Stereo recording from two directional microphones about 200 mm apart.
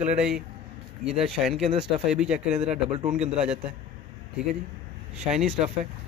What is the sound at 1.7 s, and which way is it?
Speech, 30° right (ahead or behind).